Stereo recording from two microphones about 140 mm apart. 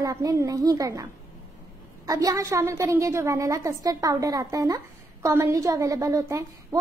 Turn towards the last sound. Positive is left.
turn(degrees=-20)  # may be behind; listen again after turning